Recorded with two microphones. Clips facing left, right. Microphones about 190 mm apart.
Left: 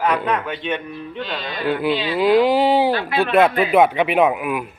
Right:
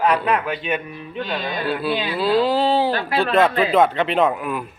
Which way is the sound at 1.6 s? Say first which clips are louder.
Left 5 dB; 15° left (ahead or behind).